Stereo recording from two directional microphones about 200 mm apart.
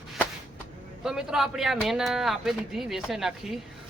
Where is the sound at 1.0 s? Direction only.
Centre (ahead or behind).